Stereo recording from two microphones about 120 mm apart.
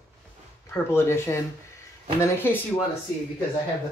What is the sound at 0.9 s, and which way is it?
Speech, 20° left (ahead or behind).